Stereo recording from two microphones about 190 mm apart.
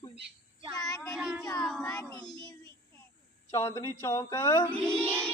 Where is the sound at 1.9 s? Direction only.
15° left (ahead or behind).